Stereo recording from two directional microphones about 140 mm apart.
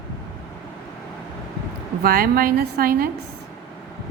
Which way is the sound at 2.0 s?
90° right.